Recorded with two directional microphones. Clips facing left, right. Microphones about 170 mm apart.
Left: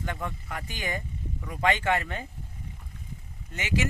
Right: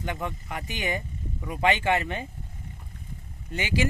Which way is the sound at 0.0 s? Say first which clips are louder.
Right 2 dB; 20° right (ahead or behind).